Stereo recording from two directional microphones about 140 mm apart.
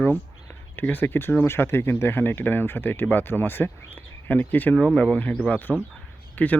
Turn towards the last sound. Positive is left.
turn(degrees=10)  # may be behind; listen again after turning